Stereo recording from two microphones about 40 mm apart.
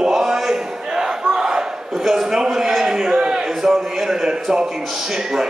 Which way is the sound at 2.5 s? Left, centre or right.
Centre.